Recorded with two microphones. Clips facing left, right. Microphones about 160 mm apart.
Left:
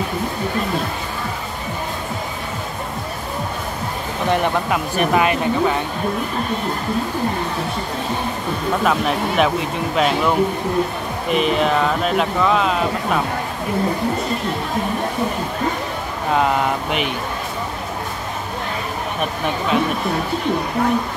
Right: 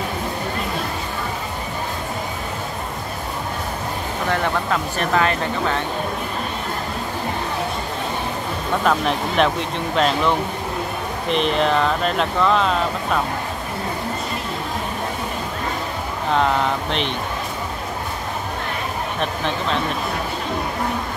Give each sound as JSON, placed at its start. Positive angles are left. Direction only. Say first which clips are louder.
{"t": 4.3, "sound": "speech", "louder": "left 3 dB", "side_deg": 15}
{"t": 8.8, "sound": "speech", "louder": "even", "side_deg": 5}